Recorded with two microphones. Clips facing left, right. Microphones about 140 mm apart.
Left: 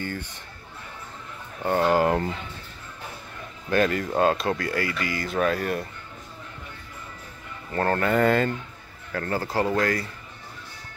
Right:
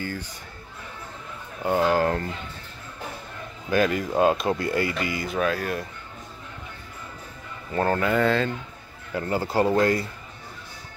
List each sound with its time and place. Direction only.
1.6 s speech: 5° right (ahead or behind)
2.0 s speech: 10° left (ahead or behind)
3.7 s speech: 5° right (ahead or behind)
5.2 s speech: 5° right (ahead or behind)
7.7 s speech: 10° right (ahead or behind)
9.1 s speech: 20° right (ahead or behind)